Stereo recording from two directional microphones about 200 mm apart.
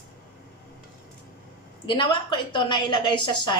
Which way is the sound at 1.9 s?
25° left (ahead or behind).